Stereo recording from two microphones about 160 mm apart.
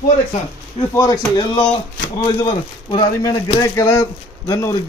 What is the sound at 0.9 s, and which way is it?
Speech, 25° left (ahead or behind).